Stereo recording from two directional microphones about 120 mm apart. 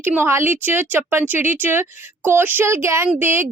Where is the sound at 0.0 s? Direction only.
20° right (ahead or behind).